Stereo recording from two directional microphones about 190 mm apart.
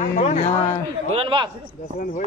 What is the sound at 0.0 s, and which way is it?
Speech, 40° left (ahead or behind).